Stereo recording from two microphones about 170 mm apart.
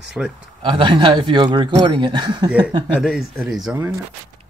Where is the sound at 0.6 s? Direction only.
30° right (ahead or behind).